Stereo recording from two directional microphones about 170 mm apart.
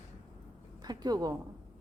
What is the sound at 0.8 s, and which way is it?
Speech, 25° right (ahead or behind).